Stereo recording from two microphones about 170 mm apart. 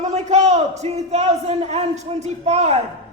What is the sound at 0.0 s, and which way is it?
A man's voice, 40° right (ahead or behind).